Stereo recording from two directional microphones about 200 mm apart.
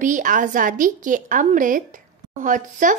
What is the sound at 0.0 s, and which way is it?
Speech, 40° right (ahead or behind).